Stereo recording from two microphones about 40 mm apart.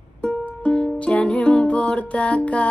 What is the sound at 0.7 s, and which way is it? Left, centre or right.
Music, left.